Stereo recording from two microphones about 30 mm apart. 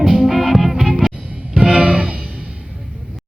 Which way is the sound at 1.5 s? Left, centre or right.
Right.